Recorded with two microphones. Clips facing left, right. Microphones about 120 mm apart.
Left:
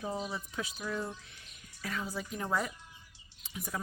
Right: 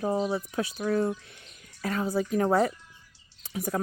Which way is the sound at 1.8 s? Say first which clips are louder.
Right 10 dB; 50° right (ahead or behind).